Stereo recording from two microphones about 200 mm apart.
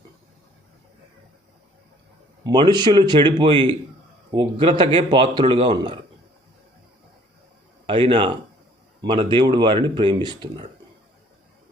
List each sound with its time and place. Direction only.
2.4 s speech: 20° right (ahead or behind)
7.9 s speech: 25° right (ahead or behind)